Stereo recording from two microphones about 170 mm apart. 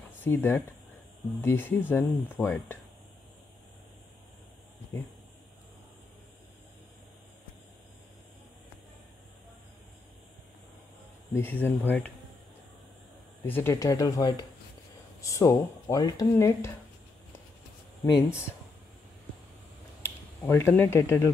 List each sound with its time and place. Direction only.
0.2 s speech: 10° left (ahead or behind)
11.3 s speech: 10° left (ahead or behind)
13.5 s speech: 15° left (ahead or behind)
20.4 s speech: 15° left (ahead or behind)